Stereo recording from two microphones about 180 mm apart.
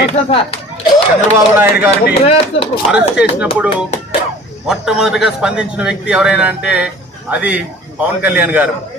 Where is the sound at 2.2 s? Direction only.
30° left (ahead or behind).